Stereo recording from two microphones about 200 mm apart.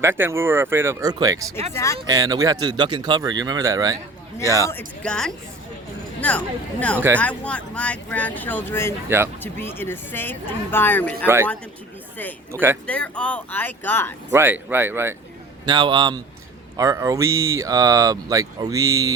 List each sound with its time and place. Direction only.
0.0 s speech: 10° right (ahead or behind)
1.7 s speech: 15° left (ahead or behind)
2.0 s speech: 20° right (ahead or behind)
4.7 s speech: 5° left (ahead or behind)
9.0 s speech: 10° right (ahead or behind)
9.4 s speech: 10° left (ahead or behind)
12.5 s speech: 10° right (ahead or behind)
12.9 s speech: 5° left (ahead or behind)
14.3 s speech: 10° right (ahead or behind)
15.6 s speech: 20° right (ahead or behind)